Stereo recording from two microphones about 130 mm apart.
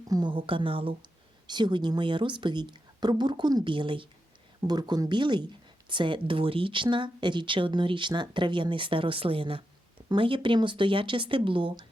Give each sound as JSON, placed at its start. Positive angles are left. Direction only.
{"t": 0.1, "sound": "speech", "side_deg": -35}